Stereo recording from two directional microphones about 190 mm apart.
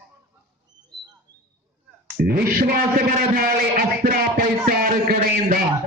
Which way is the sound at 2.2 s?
50° right (ahead or behind).